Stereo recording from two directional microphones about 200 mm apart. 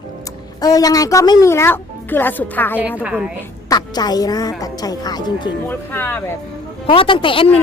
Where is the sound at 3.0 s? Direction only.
5° right (ahead or behind).